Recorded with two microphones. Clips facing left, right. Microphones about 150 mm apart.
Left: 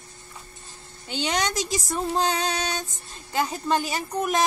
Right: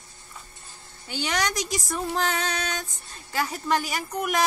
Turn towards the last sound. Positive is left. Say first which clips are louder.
# left 2 dB
turn(degrees=25)  # may be behind; listen again after turning